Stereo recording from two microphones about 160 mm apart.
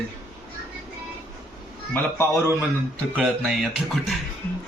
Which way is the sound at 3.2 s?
5° right (ahead or behind).